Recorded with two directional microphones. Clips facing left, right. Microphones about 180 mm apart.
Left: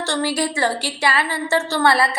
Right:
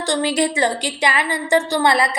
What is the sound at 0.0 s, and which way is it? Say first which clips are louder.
A woman's voice: right 3 dB; 15° right (ahead or behind).